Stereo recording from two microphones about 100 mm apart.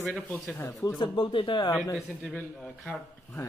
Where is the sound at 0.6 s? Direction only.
30° left (ahead or behind).